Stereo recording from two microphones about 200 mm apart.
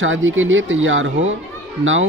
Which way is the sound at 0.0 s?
75° right (ahead or behind).